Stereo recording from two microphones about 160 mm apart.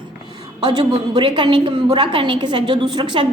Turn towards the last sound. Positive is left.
turn(degrees=-30)  # may be behind; listen again after turning